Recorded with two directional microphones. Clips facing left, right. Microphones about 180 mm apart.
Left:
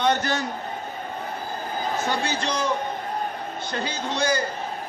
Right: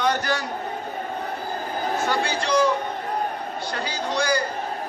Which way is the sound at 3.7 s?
25° left (ahead or behind).